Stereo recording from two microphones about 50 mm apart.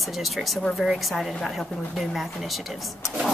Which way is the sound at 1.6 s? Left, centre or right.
Centre.